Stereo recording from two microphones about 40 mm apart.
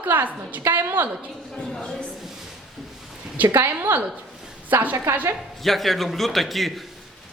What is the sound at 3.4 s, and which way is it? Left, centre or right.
A woman's voice, right.